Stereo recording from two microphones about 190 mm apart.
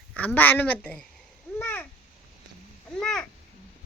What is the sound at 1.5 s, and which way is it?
Babbling, 10° left (ahead or behind).